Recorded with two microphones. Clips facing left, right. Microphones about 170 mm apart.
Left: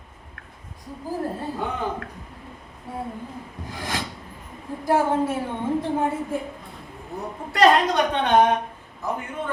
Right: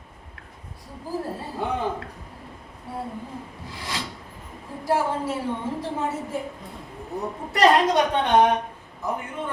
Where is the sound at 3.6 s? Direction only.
50° left (ahead or behind).